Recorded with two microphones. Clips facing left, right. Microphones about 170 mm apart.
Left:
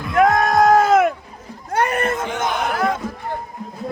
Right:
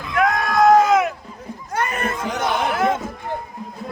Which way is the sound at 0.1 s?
45° left (ahead or behind).